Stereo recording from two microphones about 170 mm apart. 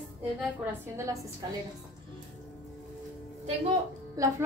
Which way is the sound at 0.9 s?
20° right (ahead or behind).